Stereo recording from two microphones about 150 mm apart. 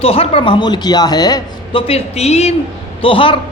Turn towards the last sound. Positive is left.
turn(degrees=35)  # may be behind; listen again after turning